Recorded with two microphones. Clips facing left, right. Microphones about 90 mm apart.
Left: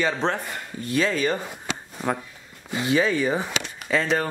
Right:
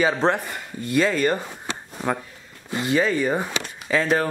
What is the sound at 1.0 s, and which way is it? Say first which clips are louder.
Speech: right 3 dB; centre (ahead or behind).